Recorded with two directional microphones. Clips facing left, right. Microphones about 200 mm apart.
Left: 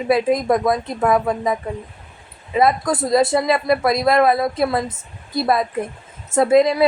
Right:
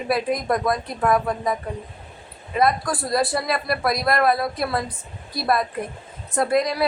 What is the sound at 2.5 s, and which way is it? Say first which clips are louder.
Speech: left 4 dB; 20° left (ahead or behind).